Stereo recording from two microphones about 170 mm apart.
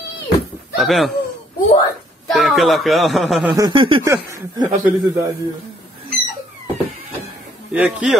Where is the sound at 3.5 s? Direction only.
25° right (ahead or behind).